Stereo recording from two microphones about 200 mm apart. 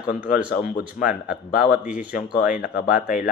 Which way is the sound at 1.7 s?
5° right (ahead or behind).